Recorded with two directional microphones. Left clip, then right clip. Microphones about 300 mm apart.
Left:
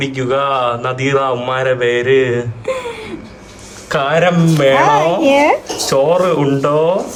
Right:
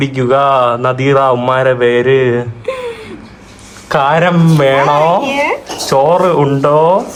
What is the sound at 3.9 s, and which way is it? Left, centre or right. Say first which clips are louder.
Speech: right 3 dB; centre.